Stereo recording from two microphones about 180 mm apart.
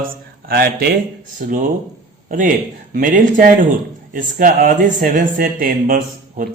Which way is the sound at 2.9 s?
50° right (ahead or behind).